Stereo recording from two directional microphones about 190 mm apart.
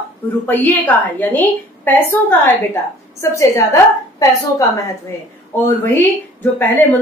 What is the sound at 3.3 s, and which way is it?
Speech, 15° left (ahead or behind).